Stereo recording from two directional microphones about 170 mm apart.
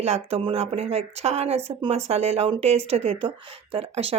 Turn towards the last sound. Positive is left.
turn(degrees=-35)  # may be behind; listen again after turning